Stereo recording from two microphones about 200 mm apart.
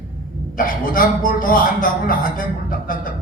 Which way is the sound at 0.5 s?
45° left (ahead or behind).